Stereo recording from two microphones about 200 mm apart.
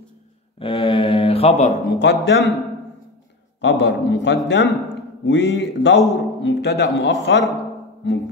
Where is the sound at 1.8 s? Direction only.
60° left (ahead or behind).